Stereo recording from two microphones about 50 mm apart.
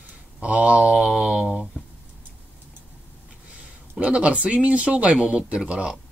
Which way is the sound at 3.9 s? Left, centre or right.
Right.